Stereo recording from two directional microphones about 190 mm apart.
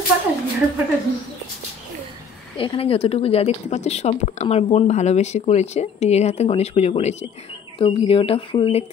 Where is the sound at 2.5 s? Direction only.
30° left (ahead or behind).